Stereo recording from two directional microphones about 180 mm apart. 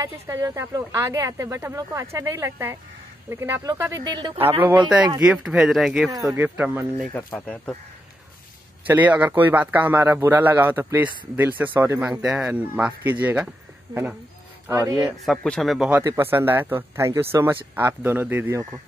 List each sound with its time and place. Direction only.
0.0 s speech: 20° right (ahead or behind)
5.2 s speech: 5° right (ahead or behind)
7.2 s speech: 10° left (ahead or behind)
8.8 s speech: 10° right (ahead or behind)
14.7 s speech: 15° right (ahead or behind)
15.2 s speech: 5° left (ahead or behind)
15.9 s speech: 15° right (ahead or behind)